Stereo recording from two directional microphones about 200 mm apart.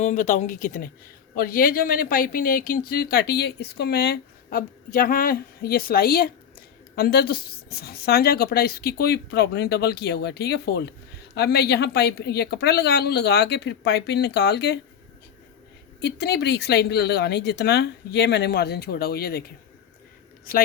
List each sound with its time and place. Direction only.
0.0 s speech: 40° left (ahead or behind); by 14.8 s 55° left (ahead or behind)
16.0 s speech: 55° left (ahead or behind)
20.5 s speech: 45° left (ahead or behind)